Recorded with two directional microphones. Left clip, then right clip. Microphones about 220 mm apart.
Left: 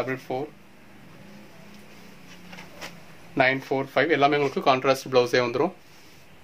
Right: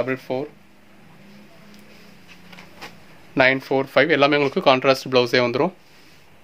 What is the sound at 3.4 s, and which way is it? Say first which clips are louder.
Speech: right 5 dB; 50° right (ahead or behind).